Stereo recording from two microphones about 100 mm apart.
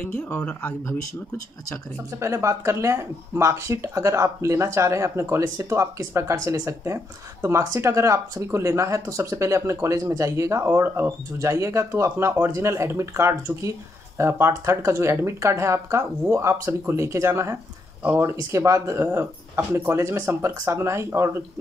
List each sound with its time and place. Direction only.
0.0 s speech: 20° left (ahead or behind)
2.1 s speech: 30° right (ahead or behind)